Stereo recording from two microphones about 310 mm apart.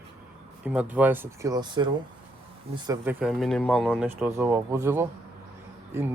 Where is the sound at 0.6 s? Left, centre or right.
Centre.